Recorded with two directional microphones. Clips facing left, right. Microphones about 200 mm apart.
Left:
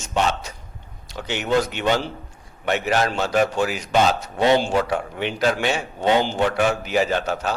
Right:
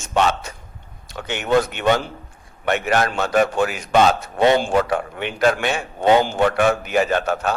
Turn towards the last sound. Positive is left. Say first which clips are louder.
# right 2 dB
turn(degrees=-55)  # may be behind; listen again after turning